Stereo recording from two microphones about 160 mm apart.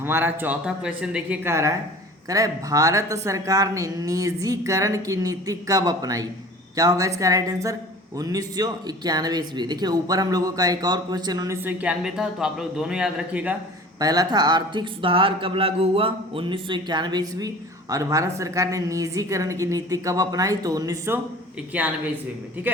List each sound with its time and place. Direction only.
0.0 s speech: 15° right (ahead or behind)
2.3 s speech: 20° right (ahead or behind)
14.0 s speech: 25° right (ahead or behind)
21.7 s speech: 10° right (ahead or behind)